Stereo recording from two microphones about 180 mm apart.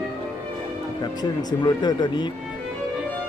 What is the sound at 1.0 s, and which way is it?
Speech, 25° left (ahead or behind).